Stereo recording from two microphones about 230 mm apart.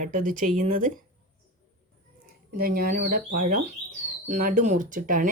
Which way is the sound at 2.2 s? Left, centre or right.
Right.